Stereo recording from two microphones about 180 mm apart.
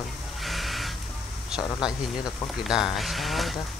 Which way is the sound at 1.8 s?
5° right (ahead or behind).